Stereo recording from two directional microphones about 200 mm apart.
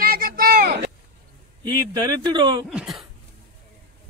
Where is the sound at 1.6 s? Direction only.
20° right (ahead or behind).